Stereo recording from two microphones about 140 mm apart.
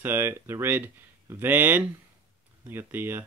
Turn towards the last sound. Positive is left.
turn(degrees=-15)  # may be behind; listen again after turning